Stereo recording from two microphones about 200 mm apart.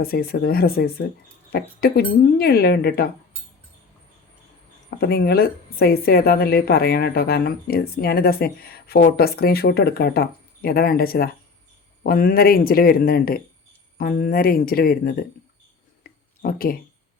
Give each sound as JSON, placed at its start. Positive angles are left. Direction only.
{"t": 0.0, "sound": "a woman's voice", "side_deg": 50}
{"t": 4.9, "sound": "a woman's voice", "side_deg": 50}
{"t": 16.0, "sound": "a sound", "side_deg": 50}